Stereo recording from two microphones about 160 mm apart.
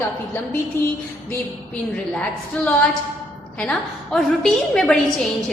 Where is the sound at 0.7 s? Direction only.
15° left (ahead or behind).